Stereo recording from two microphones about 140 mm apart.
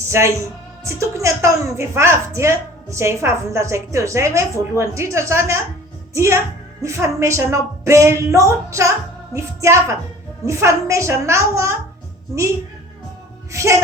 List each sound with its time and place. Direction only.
0.1 s a woman's voice: 20° right (ahead or behind)
13.5 s speech: 20° right (ahead or behind)